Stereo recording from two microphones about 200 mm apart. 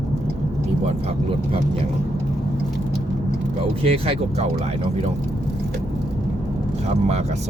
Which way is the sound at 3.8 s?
30° right (ahead or behind).